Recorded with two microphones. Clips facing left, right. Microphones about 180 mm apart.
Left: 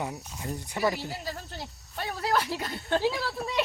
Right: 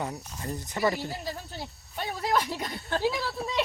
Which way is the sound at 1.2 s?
15° right (ahead or behind).